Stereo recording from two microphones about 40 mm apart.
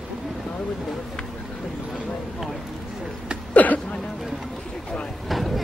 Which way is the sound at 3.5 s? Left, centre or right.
Left.